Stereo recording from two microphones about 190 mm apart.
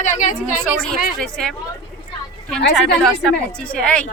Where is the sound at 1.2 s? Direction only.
5° left (ahead or behind).